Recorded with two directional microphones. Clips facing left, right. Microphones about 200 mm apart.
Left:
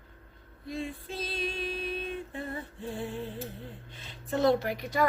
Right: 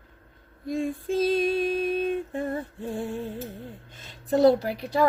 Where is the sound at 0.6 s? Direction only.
45° right (ahead or behind).